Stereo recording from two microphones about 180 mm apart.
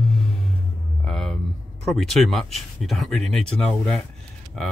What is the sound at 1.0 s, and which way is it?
Speech, centre (ahead or behind).